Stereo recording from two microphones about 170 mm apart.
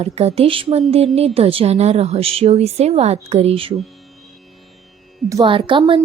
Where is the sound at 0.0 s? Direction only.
40° right (ahead or behind).